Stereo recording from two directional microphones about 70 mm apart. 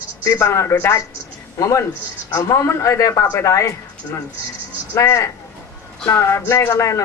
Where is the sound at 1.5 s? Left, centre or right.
Left.